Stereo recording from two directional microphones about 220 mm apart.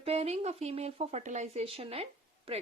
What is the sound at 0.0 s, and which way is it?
Speech, 30° right (ahead or behind).